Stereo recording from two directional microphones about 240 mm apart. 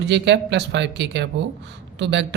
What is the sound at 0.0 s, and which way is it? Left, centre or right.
Speech, right.